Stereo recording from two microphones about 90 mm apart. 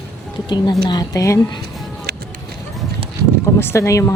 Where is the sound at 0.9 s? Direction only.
50° left (ahead or behind).